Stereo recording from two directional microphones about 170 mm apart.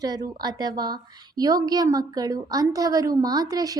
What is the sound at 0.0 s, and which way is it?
A woman's voice, 25° right (ahead or behind).